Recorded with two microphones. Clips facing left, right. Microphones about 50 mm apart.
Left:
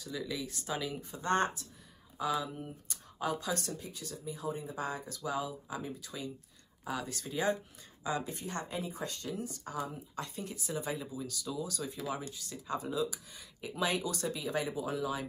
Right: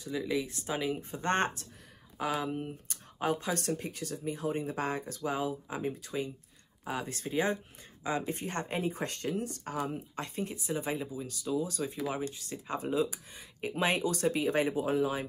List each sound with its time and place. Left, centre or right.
0.0 s speech: right
1.2 s speech: right